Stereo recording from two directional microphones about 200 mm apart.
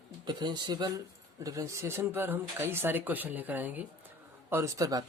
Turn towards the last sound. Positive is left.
turn(degrees=-20)  # may be behind; listen again after turning